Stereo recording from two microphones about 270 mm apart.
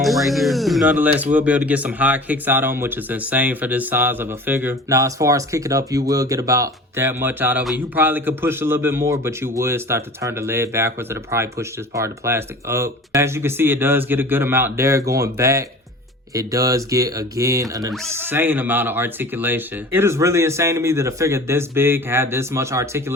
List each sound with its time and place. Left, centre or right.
0.0 s speech: centre